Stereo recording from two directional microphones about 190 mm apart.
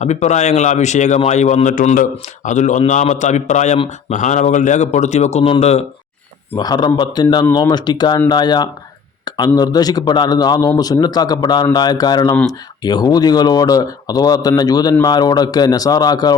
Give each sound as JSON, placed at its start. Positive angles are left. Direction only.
{"t": 0.0, "sound": "a man's voice", "side_deg": 35}
{"t": 6.6, "sound": "a man's voice", "side_deg": 20}